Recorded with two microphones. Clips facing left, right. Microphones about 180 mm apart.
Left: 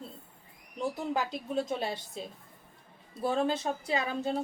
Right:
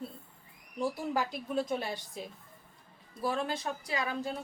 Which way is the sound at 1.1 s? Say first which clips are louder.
Left 1 dB; 20° left (ahead or behind).